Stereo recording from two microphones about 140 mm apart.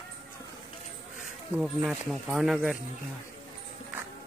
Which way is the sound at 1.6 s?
5° right (ahead or behind).